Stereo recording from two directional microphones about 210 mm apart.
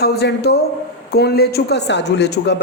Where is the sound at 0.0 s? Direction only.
50° left (ahead or behind).